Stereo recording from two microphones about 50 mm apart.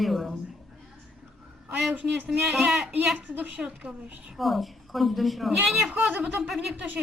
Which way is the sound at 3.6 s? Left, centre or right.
Centre.